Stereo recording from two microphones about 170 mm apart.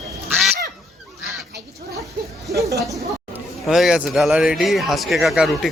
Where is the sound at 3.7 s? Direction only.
5° right (ahead or behind).